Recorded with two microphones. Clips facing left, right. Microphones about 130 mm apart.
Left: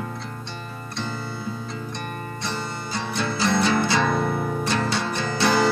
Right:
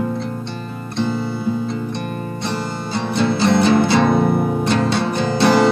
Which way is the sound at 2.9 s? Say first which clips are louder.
Right 9 dB; 30° right (ahead or behind).